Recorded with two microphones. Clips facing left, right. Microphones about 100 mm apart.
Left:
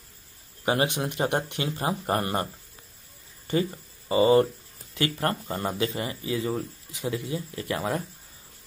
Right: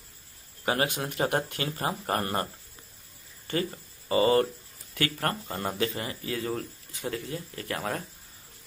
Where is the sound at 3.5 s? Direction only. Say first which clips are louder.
Left 4 dB; 15° left (ahead or behind).